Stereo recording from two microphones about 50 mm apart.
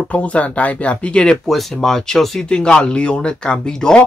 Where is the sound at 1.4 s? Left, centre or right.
Centre.